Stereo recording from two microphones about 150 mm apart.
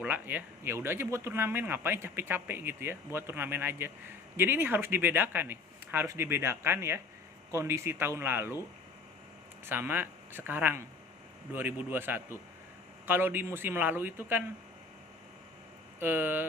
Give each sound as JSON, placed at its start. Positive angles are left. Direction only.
{"t": 0.0, "sound": "speech", "side_deg": -10}
{"t": 9.6, "sound": "speech", "side_deg": -15}
{"t": 16.0, "sound": "speech", "side_deg": -15}